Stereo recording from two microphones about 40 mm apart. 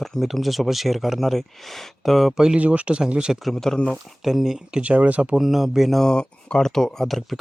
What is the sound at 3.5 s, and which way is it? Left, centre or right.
Speech, centre.